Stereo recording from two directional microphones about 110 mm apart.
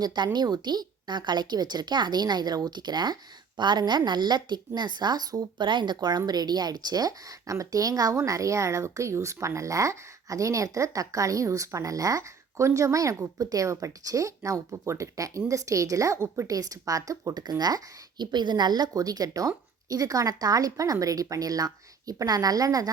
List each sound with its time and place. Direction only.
0.0 s a woman's voice: 40° right (ahead or behind)